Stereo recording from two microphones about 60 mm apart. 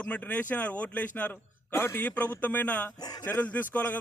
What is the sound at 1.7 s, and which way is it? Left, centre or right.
Speech, left.